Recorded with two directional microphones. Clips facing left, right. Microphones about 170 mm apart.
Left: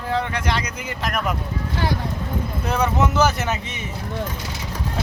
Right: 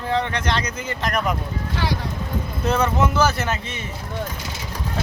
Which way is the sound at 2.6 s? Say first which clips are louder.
Right 1 dB; 15° left (ahead or behind).